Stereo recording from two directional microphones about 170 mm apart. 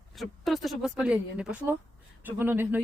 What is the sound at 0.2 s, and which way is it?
Speech, centre (ahead or behind).